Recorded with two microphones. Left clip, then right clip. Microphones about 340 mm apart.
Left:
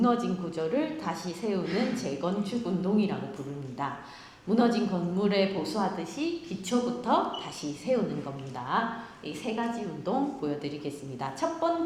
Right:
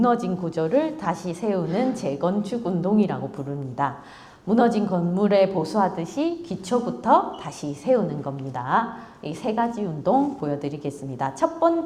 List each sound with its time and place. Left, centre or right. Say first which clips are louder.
0.0 s a woman's voice: right 6 dB; right
8.5 s speech: right 7 dB; right
9.2 s a woman's voice: right 9 dB; right